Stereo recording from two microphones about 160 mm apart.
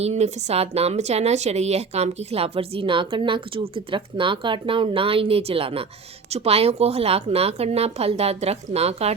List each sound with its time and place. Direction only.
0.0 s a woman's voice: 40° right (ahead or behind)